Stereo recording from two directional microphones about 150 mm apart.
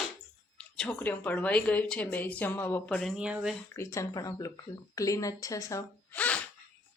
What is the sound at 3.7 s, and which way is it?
Speech, 20° left (ahead or behind).